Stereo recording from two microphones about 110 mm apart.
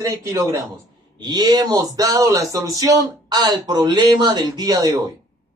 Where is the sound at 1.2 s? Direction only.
40° right (ahead or behind).